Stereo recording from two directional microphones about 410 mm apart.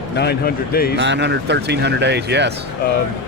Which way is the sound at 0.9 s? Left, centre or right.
Right.